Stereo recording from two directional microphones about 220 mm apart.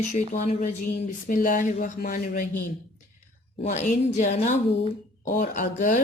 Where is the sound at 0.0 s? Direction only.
35° left (ahead or behind).